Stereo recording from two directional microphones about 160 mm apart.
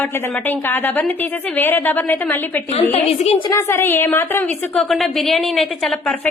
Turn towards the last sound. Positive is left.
turn(degrees=0)  # may be behind; listen again after turning